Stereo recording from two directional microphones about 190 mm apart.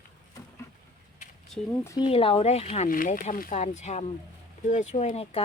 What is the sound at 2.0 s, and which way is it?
Speech, 30° left (ahead or behind).